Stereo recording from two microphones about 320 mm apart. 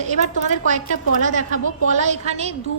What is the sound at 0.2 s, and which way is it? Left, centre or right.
A woman's voice, right.